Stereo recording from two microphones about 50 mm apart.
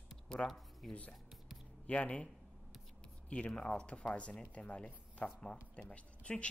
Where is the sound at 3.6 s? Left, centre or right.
Left.